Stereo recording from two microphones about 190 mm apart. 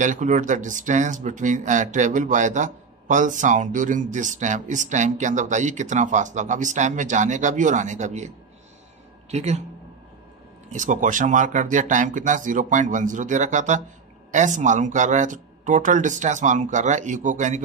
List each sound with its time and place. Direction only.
0.0 s speech: 40° right (ahead or behind)
9.3 s speech: 35° right (ahead or behind)
10.7 s speech: 40° right (ahead or behind)